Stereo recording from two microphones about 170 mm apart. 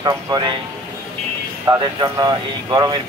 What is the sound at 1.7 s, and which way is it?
Speech, 20° right (ahead or behind).